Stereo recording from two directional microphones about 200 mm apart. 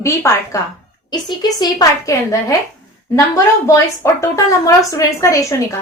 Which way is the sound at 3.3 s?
15° left (ahead or behind).